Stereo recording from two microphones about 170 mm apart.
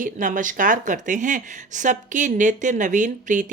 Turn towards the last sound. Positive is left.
turn(degrees=-50)  # may be behind; listen again after turning